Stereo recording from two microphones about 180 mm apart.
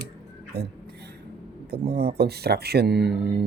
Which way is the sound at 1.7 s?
60° right (ahead or behind).